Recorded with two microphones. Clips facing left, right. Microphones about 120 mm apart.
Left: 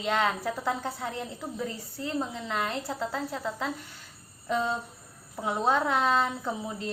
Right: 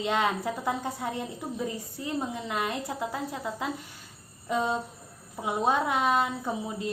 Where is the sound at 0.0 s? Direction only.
20° right (ahead or behind).